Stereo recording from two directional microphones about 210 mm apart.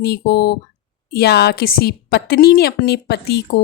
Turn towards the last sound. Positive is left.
turn(degrees=50)  # may be behind; listen again after turning